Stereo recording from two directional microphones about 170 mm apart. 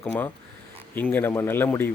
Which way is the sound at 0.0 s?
10° left (ahead or behind).